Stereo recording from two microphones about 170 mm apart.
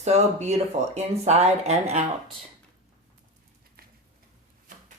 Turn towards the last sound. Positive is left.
turn(degrees=-60)  # may be behind; listen again after turning